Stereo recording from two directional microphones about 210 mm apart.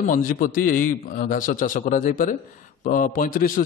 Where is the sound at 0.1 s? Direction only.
40° left (ahead or behind).